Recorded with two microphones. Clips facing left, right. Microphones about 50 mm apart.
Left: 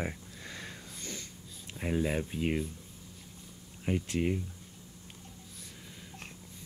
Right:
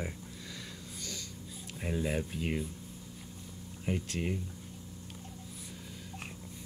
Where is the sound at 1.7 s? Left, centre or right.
Centre.